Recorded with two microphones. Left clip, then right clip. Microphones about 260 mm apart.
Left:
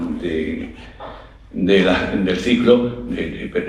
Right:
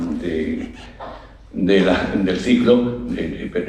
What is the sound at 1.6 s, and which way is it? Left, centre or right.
Speech, left.